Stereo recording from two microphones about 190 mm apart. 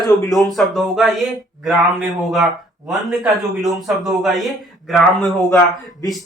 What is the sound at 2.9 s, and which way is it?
Speech, centre (ahead or behind).